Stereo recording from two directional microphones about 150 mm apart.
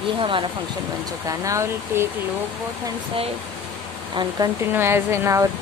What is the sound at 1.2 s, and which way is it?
Speech, 20° right (ahead or behind).